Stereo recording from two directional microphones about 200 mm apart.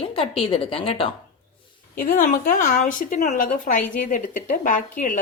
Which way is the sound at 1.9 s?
45° left (ahead or behind).